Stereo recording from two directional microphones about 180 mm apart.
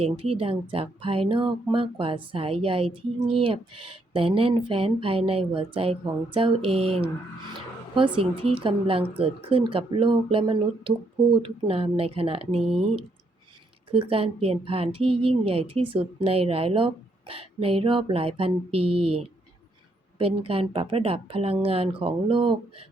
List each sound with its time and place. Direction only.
0.0 s a woman's voice: 30° right (ahead or behind)